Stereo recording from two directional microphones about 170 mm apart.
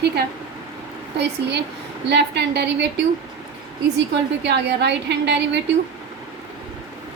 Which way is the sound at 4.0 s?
90° right.